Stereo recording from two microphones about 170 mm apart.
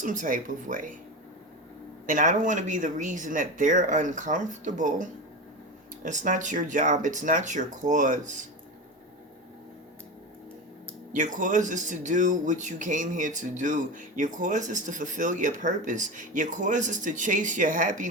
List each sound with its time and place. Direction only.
0.0 s speech: 50° right (ahead or behind)
2.0 s speech: 50° right (ahead or behind)
11.1 s speech: 50° right (ahead or behind)